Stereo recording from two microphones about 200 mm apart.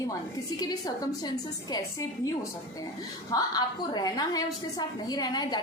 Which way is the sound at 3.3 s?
20° left (ahead or behind).